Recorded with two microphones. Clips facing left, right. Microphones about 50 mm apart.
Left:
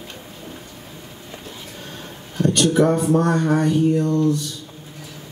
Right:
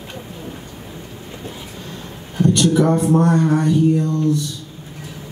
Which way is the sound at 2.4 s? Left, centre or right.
Left.